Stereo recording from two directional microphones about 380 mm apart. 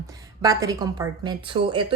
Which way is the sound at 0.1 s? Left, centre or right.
Centre.